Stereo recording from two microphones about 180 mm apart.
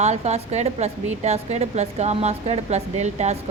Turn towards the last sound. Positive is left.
turn(degrees=-40)  # may be behind; listen again after turning